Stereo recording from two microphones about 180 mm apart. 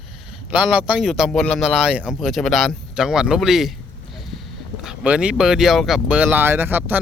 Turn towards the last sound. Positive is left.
turn(degrees=-10)  # may be behind; listen again after turning